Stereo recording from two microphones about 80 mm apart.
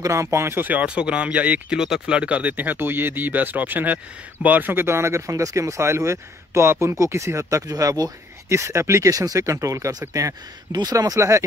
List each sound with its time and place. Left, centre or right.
0.0 s speech: right